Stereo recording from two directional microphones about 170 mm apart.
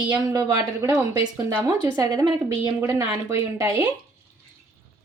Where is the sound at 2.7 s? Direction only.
10° right (ahead or behind).